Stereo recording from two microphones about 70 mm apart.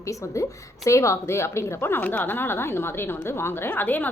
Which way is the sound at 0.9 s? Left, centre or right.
Left.